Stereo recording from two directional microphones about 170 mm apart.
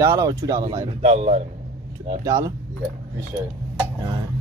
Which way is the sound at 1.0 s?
40° right (ahead or behind).